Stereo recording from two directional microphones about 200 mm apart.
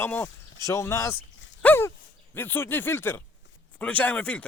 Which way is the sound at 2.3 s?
10° left (ahead or behind).